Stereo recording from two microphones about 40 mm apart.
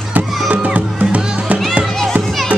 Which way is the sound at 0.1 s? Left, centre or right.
Right.